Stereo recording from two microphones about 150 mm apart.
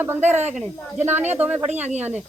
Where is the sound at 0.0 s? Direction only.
15° right (ahead or behind).